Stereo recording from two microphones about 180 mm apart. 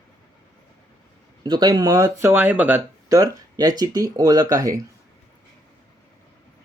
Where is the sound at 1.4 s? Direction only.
20° right (ahead or behind).